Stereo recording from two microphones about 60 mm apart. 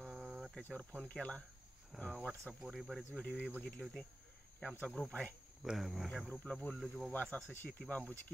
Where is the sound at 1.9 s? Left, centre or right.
Centre.